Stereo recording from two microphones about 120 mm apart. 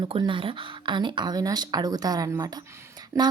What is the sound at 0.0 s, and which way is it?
A woman's voice, 45° right (ahead or behind).